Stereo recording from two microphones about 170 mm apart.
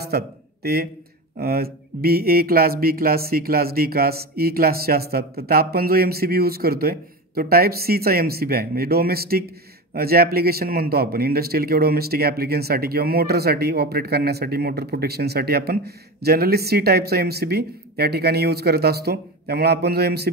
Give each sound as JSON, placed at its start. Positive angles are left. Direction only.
{"t": 0.1, "sound": "a man's voice", "side_deg": -70}